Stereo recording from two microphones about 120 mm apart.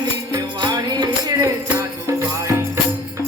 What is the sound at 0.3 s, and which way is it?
Music, 35° right (ahead or behind).